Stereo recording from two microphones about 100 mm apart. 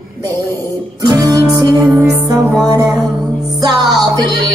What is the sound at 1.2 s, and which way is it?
Music, 40° right (ahead or behind).